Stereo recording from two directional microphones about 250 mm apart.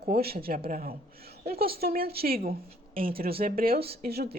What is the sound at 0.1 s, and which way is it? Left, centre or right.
A woman's voice, right.